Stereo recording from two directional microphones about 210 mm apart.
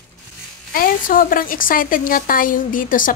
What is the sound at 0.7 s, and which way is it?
A woman's voice, 40° left (ahead or behind).